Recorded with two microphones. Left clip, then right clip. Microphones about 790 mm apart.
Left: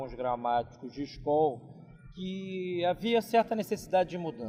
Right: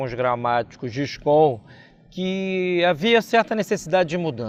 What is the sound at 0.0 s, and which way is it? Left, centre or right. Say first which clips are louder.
A man's voice: right 10 dB; right.